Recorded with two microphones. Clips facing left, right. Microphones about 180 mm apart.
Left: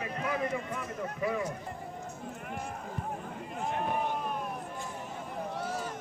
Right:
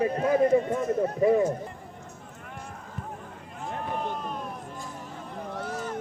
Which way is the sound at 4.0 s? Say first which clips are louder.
Even; 10° left (ahead or behind).